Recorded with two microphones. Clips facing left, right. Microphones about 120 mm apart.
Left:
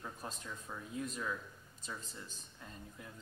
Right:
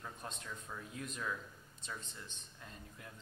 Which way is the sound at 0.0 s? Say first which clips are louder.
Left 1 dB; 5° left (ahead or behind).